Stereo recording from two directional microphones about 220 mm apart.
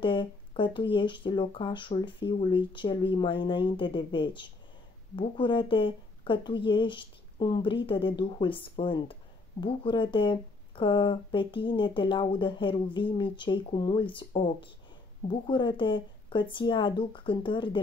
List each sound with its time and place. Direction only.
0.0 s speech: 20° left (ahead or behind)